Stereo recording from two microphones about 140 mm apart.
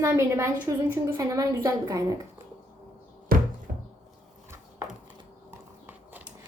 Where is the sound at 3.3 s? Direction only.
90° right.